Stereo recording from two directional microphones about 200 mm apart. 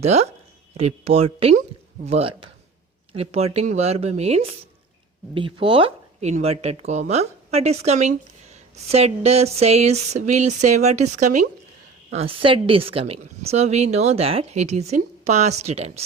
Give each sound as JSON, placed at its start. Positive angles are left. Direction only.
{"t": 0.0, "sound": "a woman's voice", "side_deg": -30}